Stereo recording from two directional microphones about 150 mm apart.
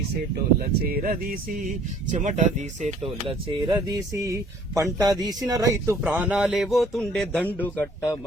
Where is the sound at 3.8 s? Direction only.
20° right (ahead or behind); by 8.2 s 15° left (ahead or behind).